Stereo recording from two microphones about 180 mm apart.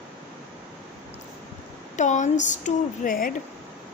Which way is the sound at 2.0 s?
40° left (ahead or behind).